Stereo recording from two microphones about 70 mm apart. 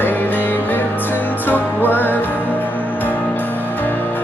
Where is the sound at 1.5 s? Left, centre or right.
Left.